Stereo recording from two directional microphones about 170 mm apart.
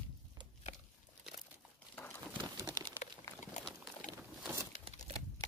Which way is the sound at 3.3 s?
15° left (ahead or behind).